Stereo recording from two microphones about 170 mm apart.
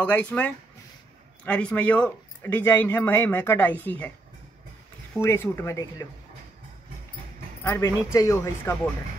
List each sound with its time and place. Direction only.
0.0 s speech: 10° left (ahead or behind)
5.2 s speech: 15° left (ahead or behind)
7.6 s speech: 15° left (ahead or behind)